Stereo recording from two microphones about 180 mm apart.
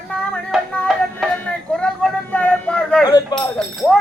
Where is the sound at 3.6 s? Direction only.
5° left (ahead or behind).